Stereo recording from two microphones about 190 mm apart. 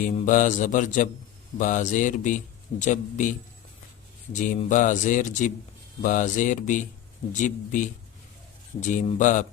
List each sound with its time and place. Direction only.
0.0 s a man's voice: 40° left (ahead or behind)
8.9 s a man's voice: 40° left (ahead or behind)